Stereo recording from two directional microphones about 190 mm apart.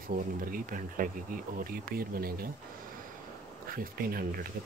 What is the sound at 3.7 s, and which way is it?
Speech, 50° right (ahead or behind).